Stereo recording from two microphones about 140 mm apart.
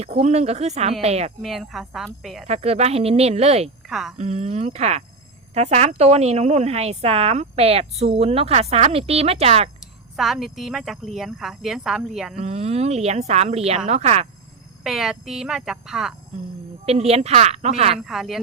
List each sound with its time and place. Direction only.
0.2 s a woman's voice: 50° right (ahead or behind)
1.4 s speech: centre (ahead or behind)
2.5 s a woman's voice: 50° right (ahead or behind)
3.8 s a woman's voice: 5° right (ahead or behind)
4.2 s a woman's voice: 50° right (ahead or behind)
10.2 s speech: 5° right (ahead or behind)
12.4 s a woman's voice: 50° right (ahead or behind)
14.8 s speech: 5° right (ahead or behind)
16.8 s a woman's voice: 50° right (ahead or behind)
18.0 s speech: centre (ahead or behind)